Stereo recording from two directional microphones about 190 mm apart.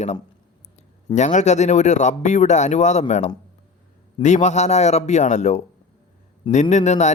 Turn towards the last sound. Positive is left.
turn(degrees=35)  # may be behind; listen again after turning